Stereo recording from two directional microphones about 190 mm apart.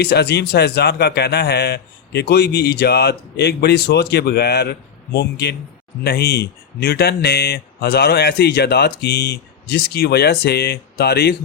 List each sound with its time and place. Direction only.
0.0 s a man's voice: 60° left (ahead or behind)